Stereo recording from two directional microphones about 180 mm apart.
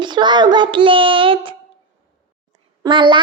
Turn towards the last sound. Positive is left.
turn(degrees=-25)  # may be behind; listen again after turning